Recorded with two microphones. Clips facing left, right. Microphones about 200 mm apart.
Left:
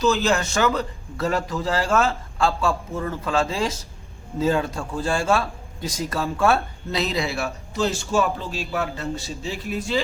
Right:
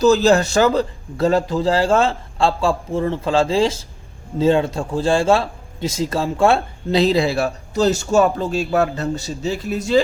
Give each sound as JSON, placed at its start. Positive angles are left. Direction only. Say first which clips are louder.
{"t": 0.0, "sound": "a man's voice", "louder": "right 7 dB", "side_deg": -35}